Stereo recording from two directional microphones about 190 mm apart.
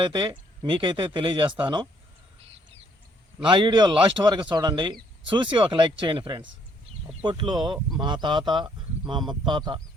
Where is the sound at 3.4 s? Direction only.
25° right (ahead or behind).